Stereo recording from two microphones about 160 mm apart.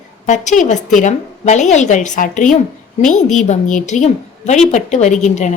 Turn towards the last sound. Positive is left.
turn(degrees=50)  # may be behind; listen again after turning